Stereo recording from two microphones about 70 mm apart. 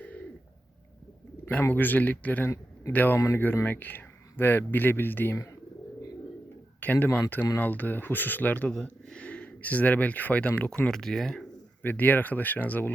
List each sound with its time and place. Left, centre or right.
0.0 s a sound: left
1.7 s speech: left
6.7 s speech: left
8.7 s speech: centre
10.9 s speech: centre
11.8 s speech: left